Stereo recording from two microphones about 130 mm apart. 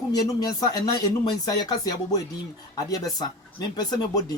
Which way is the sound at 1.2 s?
30° left (ahead or behind).